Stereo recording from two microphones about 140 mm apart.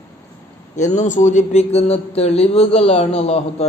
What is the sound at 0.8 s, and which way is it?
Speech, 55° left (ahead or behind).